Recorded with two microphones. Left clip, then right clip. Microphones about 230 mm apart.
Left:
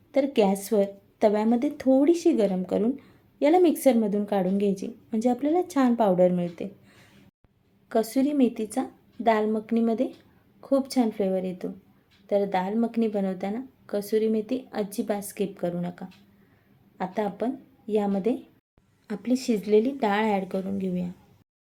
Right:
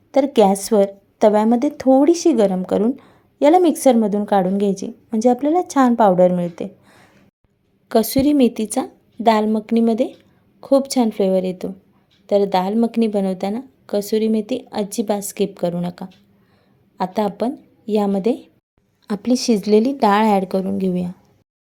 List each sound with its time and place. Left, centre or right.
0.1 s a woman's voice: right
7.9 s a woman's voice: right